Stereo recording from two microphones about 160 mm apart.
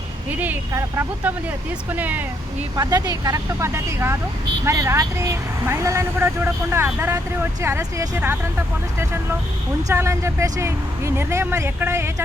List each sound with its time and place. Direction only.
0.3 s speech: 10° right (ahead or behind)
2.7 s speech: 25° right (ahead or behind)
9.9 s speech: 15° right (ahead or behind)